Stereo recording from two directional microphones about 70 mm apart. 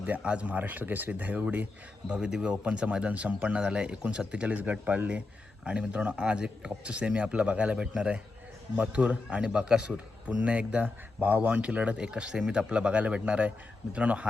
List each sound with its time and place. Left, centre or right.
0.0 s speech: centre
2.0 s speech: centre